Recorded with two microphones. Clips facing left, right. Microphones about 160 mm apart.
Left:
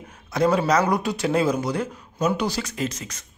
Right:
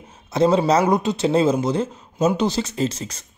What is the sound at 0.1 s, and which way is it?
A man's voice, 25° right (ahead or behind).